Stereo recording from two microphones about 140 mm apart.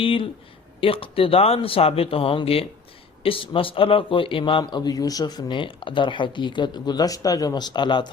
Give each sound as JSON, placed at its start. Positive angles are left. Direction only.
{"t": 0.0, "sound": "speech", "side_deg": 40}